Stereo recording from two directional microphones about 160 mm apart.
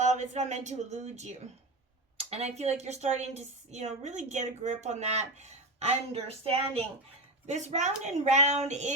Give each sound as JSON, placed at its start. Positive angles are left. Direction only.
{"t": 0.0, "sound": "a woman's voice", "side_deg": -50}